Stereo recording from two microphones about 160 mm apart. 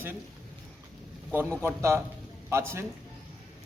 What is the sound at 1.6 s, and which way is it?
A man's voice, 15° right (ahead or behind).